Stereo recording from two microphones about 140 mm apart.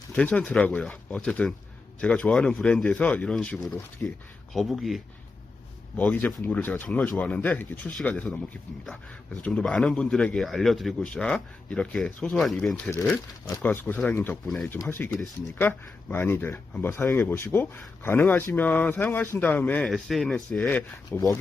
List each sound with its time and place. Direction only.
0.2 s speech: 10° left (ahead or behind)
6.0 s speech: 10° left (ahead or behind)
12.7 s speech: 15° left (ahead or behind)